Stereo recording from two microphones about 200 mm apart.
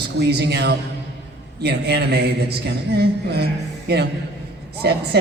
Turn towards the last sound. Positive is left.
turn(degrees=-55)  # may be behind; listen again after turning